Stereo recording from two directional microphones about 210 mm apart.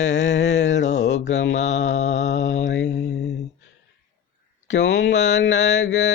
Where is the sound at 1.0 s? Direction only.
60° left (ahead or behind).